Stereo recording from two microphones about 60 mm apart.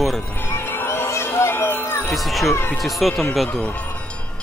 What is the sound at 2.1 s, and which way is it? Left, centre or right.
Speech, centre.